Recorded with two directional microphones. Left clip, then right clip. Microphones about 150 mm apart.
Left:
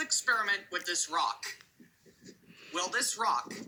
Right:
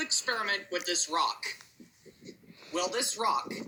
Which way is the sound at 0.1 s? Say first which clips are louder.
Left 4 dB; 45° left (ahead or behind).